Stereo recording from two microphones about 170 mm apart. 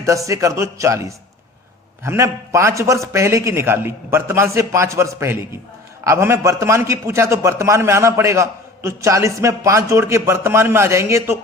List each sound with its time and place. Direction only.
0.0 s a man's voice: 20° right (ahead or behind)